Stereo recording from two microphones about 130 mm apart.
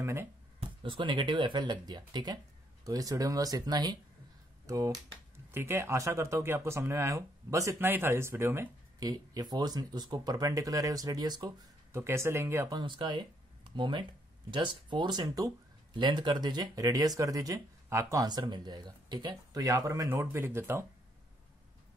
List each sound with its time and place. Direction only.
0.0 s speech: 20° right (ahead or behind)
0.7 s speech: 40° right (ahead or behind); by 8.6 s 20° right (ahead or behind)
9.0 s speech: 30° right (ahead or behind)
12.7 s speech: 35° right (ahead or behind)
20.1 s speech: 15° right (ahead or behind)